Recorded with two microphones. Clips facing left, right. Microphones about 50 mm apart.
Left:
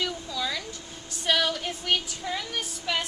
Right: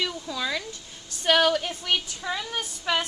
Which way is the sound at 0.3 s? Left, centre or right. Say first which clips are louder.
Right 2 dB; right.